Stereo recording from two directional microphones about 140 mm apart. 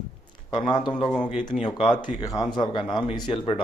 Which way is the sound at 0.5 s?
30° left (ahead or behind).